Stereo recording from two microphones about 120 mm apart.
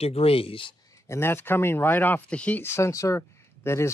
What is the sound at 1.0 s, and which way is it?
Speech, 20° left (ahead or behind).